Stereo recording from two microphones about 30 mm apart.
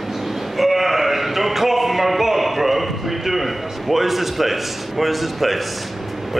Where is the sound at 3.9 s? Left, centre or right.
Centre.